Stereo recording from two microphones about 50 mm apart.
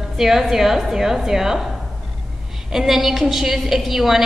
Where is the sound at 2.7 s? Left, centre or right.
Centre.